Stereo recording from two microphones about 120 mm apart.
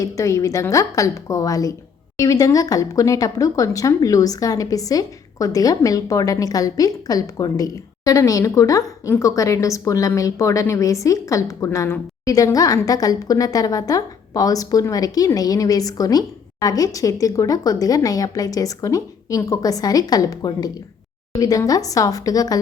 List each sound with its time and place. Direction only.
0.0 s a woman's voice: 25° left (ahead or behind)